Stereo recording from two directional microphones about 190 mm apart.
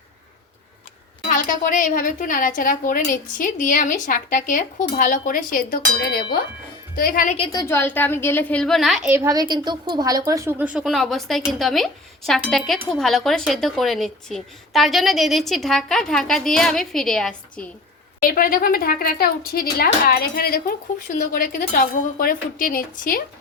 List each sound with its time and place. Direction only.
1.3 s a woman's voice: 45° left (ahead or behind)
7.3 s a woman's voice: 30° left (ahead or behind)
7.7 s a woman's voice: 10° left (ahead or behind)
18.2 s a woman's voice: 50° left (ahead or behind)